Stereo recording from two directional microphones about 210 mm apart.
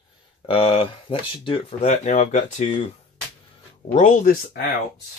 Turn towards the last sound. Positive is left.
turn(degrees=40)  # may be behind; listen again after turning